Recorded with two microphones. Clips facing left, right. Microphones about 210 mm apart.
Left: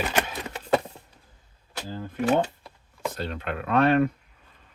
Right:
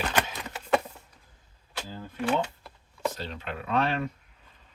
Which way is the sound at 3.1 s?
55° left (ahead or behind).